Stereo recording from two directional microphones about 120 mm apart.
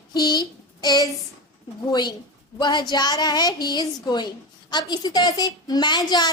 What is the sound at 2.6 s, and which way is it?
A woman's voice, 35° left (ahead or behind).